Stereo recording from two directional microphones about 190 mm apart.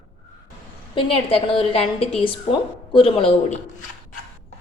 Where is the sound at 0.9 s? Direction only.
30° left (ahead or behind).